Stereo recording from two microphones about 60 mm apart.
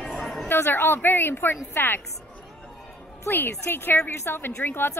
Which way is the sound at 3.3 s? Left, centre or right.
Left.